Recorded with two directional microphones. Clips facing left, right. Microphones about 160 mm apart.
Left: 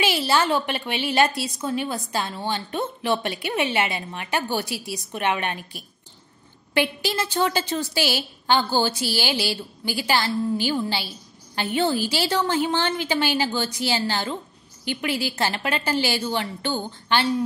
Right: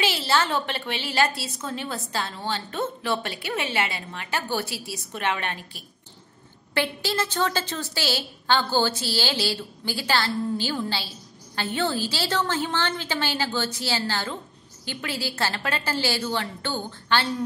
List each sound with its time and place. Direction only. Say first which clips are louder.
0.0 s a woman's voice: left 3 dB; 15° left (ahead or behind)